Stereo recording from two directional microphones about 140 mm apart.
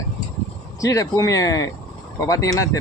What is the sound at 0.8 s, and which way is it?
Speech, 25° left (ahead or behind).